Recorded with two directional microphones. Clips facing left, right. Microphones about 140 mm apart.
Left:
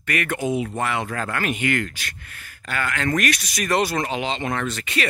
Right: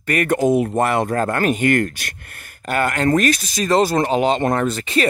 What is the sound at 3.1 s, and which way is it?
Speech, 30° right (ahead or behind).